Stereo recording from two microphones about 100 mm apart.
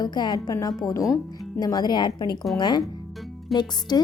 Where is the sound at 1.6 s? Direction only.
40° left (ahead or behind).